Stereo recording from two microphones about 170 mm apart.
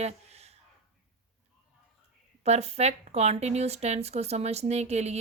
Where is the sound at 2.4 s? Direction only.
40° right (ahead or behind).